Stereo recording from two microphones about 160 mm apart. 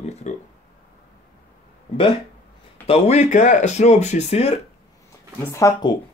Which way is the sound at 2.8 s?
40° left (ahead or behind).